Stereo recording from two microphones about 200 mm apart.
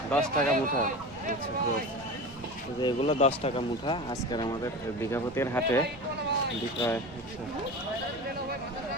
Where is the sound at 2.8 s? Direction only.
30° left (ahead or behind); by 5.8 s 10° left (ahead or behind).